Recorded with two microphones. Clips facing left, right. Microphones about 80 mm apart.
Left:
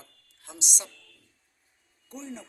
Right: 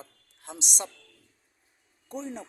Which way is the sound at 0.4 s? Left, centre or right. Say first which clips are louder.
Right 4 dB; right.